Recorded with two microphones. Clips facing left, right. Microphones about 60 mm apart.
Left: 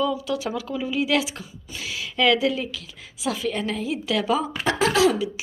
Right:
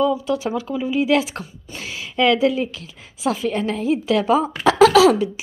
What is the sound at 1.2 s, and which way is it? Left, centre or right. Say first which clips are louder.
Speech: right 3 dB; right.